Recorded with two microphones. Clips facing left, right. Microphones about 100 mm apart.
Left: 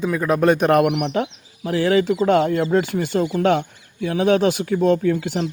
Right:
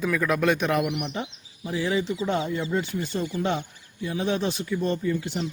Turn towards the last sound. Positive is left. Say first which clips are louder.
# left 7 dB
turn(degrees=85)